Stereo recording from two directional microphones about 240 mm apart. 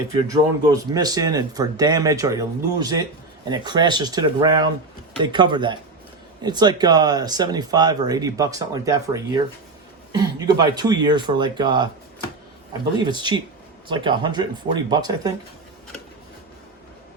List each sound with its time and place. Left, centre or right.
0.1 s speech: centre
13.0 s speech: centre